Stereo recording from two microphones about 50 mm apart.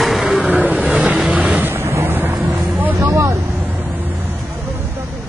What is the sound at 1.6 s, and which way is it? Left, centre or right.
Boat, right.